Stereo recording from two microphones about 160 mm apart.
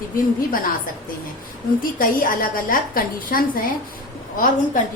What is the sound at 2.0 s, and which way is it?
A woman's voice, 60° left (ahead or behind).